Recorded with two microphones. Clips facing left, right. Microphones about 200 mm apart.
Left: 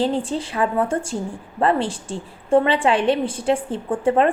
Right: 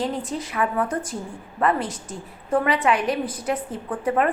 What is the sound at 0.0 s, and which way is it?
A woman's voice, 30° left (ahead or behind).